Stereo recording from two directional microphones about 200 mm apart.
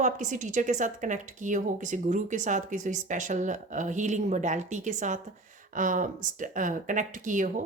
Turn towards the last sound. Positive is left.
turn(degrees=-40)  # may be behind; listen again after turning